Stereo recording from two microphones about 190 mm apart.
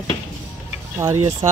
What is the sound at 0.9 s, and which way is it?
Speech, 15° right (ahead or behind).